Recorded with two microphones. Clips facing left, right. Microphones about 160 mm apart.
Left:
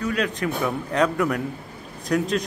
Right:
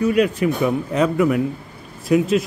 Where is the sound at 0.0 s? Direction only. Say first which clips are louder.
Right 8 dB; 10° right (ahead or behind).